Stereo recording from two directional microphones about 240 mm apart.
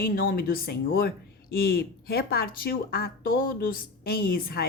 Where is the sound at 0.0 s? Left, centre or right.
Left.